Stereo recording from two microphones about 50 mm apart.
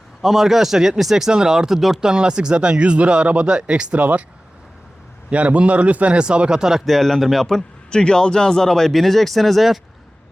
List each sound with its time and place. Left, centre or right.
0.2 s speech: centre; by 4.3 s right
5.3 s speech: right
6.8 s speech: centre
7.9 s speech: centre